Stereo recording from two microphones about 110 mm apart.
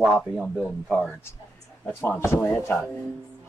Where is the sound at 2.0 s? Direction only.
20° left (ahead or behind).